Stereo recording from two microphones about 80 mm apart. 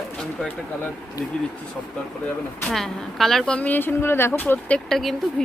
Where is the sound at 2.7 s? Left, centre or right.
Centre; by 4.6 s left.